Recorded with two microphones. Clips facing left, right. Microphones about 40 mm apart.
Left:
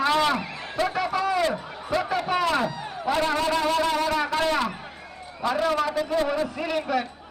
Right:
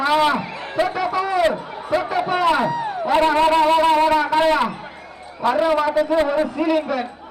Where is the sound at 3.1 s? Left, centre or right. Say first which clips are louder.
Right 9 dB; right.